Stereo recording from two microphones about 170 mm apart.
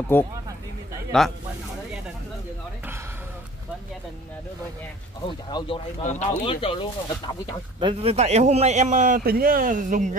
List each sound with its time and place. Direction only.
0.1 s speech: 10° left (ahead or behind)
5.2 s speech: 25° left (ahead or behind)
7.8 s a man's voice: 35° right (ahead or behind)